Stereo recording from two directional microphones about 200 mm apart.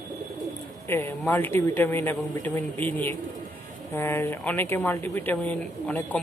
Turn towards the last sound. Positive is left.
turn(degrees=10)  # may be behind; listen again after turning